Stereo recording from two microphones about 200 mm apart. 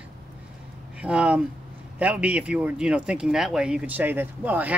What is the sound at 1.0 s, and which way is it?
Speech, 5° right (ahead or behind).